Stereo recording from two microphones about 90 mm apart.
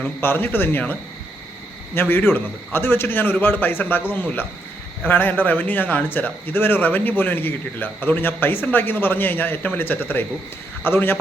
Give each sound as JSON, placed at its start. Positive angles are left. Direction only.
{"t": 0.0, "sound": "a man's voice", "side_deg": 25}
{"t": 2.0, "sound": "a man's voice", "side_deg": 25}